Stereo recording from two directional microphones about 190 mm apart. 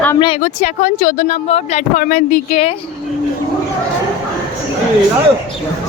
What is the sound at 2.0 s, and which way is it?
Speech, 45° left (ahead or behind).